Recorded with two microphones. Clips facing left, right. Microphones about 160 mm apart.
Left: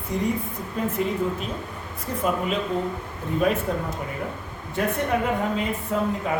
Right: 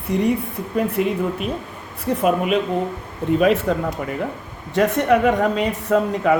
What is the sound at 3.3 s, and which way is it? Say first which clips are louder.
Speech: right 6 dB; 80° right.